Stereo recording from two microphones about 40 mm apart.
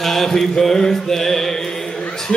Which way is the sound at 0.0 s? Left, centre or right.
Centre.